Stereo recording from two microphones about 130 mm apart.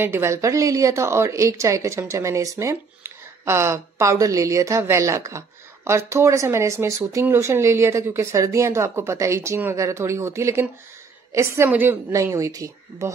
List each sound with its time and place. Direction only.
0.0 s a woman's voice: 20° right (ahead or behind)